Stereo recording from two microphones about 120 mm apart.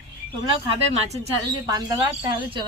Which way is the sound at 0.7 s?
65° right (ahead or behind).